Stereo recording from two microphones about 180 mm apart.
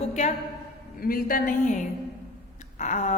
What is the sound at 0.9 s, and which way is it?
A woman's voice, 55° left (ahead or behind).